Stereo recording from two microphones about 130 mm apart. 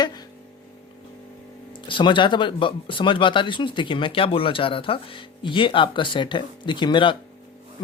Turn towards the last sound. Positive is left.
turn(degrees=40)  # may be behind; listen again after turning